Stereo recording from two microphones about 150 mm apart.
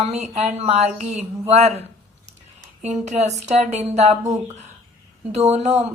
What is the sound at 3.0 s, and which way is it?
A woman's voice, 50° right (ahead or behind).